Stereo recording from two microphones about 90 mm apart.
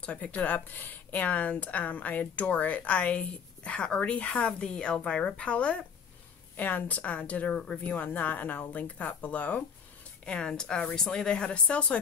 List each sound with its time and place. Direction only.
0.0 s speech: 15° left (ahead or behind)